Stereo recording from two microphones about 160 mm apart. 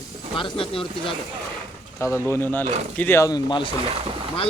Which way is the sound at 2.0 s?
15° left (ahead or behind).